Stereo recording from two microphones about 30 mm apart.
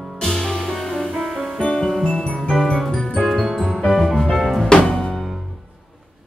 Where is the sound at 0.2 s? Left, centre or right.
Centre.